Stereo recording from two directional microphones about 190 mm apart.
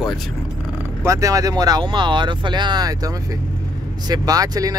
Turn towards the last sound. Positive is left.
turn(degrees=-20)  # may be behind; listen again after turning